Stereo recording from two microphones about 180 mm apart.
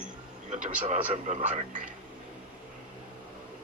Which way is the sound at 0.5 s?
40° right (ahead or behind).